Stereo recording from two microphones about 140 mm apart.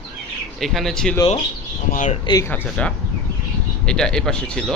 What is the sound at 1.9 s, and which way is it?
Speech, 65° left (ahead or behind).